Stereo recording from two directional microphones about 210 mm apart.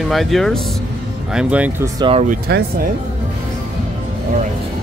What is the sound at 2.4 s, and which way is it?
Speech, 50° right (ahead or behind).